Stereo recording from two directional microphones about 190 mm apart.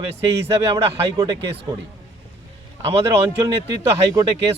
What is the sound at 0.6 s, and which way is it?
Speech, 20° right (ahead or behind).